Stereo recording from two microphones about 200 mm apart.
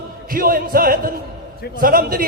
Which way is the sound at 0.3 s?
45° right (ahead or behind).